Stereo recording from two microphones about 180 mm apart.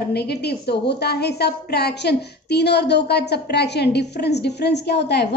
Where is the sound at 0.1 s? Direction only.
65° left (ahead or behind).